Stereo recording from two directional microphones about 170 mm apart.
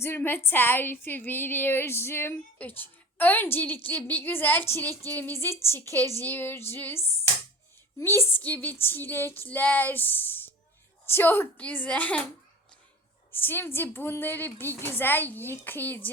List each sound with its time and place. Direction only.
0.0 s a woman's voice: 10° left (ahead or behind)
13.3 s a woman's voice: 10° left (ahead or behind)